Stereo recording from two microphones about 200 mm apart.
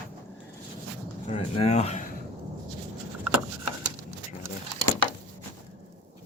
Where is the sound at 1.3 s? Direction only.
30° left (ahead or behind).